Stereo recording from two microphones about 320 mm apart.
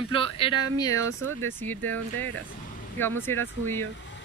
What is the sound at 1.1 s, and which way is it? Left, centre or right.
Speech, right.